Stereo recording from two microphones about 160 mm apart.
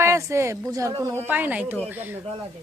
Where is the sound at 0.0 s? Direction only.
20° right (ahead or behind).